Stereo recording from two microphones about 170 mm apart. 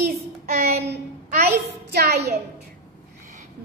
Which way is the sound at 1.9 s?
70° right (ahead or behind).